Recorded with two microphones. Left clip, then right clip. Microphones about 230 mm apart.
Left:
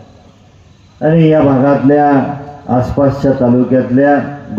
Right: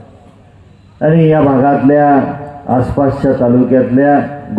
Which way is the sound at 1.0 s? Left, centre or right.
Right.